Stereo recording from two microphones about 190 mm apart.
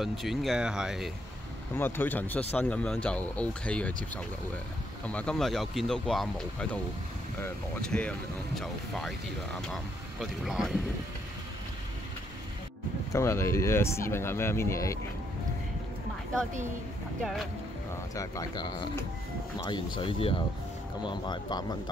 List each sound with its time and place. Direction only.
0.0 s speech: centre (ahead or behind)
1.8 s speech: 10° left (ahead or behind)
5.0 s speech: 5° left (ahead or behind)
13.1 s speech: 15° left (ahead or behind)
18.1 s speech: 15° left (ahead or behind)
20.0 s speech: 30° left (ahead or behind)